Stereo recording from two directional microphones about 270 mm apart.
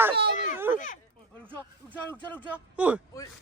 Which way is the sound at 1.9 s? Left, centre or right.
Centre.